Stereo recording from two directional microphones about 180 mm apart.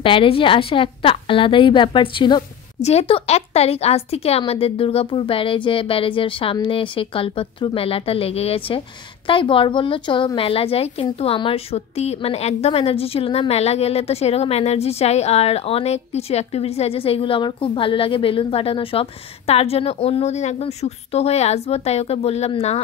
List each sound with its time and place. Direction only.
0.0 s a woman's voice: 30° left (ahead or behind)